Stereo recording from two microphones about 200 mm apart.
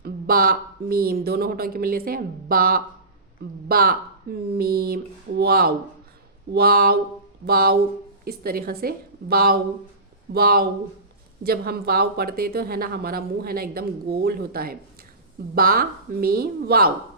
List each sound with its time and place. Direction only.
0.0 s speech: 45° right (ahead or behind)